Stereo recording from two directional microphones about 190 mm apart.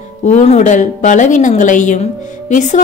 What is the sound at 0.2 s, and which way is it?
A woman's voice, 40° left (ahead or behind).